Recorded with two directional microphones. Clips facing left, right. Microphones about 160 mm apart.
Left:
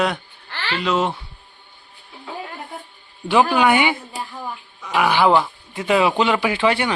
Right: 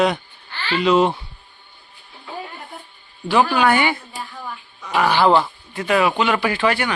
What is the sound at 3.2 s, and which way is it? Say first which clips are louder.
Speech: left 1 dB; 15° left (ahead or behind).